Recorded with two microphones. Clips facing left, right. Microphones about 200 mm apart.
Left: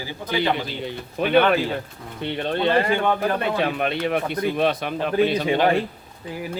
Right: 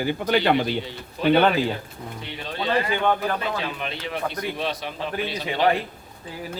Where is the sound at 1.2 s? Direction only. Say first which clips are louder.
Left 1 dB; 55° left (ahead or behind).